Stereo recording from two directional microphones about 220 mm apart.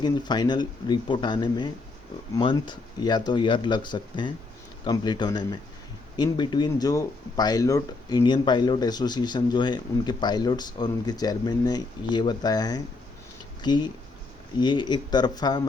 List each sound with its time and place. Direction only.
0.0 s speech: 20° left (ahead or behind)